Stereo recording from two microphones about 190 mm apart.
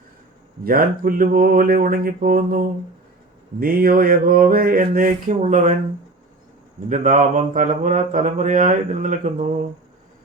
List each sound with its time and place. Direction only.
0.6 s mantra: 50° right (ahead or behind)
6.8 s mantra: 40° right (ahead or behind)